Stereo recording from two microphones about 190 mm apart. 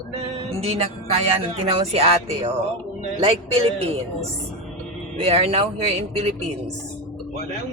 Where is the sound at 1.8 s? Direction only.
30° right (ahead or behind).